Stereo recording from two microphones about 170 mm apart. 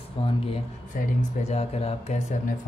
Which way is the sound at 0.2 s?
30° left (ahead or behind).